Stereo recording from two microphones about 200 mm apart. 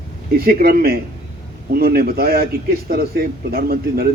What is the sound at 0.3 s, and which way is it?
A man's voice, 50° right (ahead or behind).